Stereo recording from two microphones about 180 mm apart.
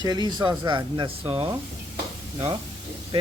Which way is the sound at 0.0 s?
25° right (ahead or behind).